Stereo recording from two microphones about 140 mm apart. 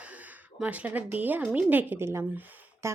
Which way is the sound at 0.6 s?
10° right (ahead or behind).